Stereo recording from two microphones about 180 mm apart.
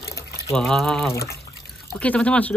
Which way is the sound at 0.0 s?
15° left (ahead or behind).